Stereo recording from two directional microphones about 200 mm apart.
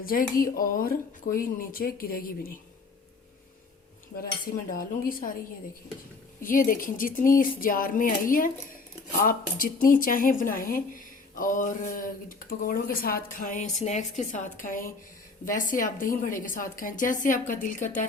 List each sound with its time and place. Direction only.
0.0 s speech: 45° left (ahead or behind)
4.7 s speech: 45° left (ahead or behind)
6.4 s a woman's voice: 45° left (ahead or behind)